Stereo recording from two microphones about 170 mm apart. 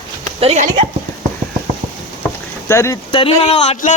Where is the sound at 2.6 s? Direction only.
15° left (ahead or behind).